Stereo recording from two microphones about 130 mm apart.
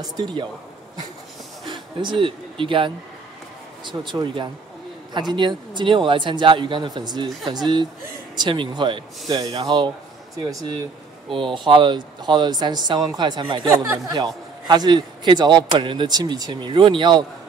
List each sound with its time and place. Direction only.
0.0 s a man's voice: 30° right (ahead or behind)
1.7 s a man's voice: 35° right (ahead or behind)